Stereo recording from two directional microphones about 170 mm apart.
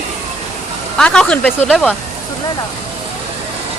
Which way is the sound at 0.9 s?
5° left (ahead or behind).